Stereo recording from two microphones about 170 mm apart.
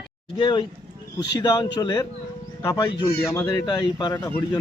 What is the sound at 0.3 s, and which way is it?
Speech, 30° left (ahead or behind).